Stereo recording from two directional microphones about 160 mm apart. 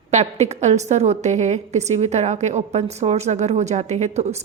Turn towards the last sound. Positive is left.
turn(degrees=-45)  # may be behind; listen again after turning